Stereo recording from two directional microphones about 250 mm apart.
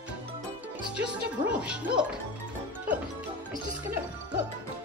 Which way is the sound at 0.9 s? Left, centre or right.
Centre.